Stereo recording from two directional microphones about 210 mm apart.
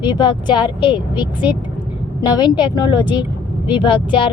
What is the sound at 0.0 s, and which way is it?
Speech, 20° left (ahead or behind).